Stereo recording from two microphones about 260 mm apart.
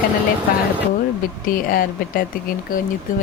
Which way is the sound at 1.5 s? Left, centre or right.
Left.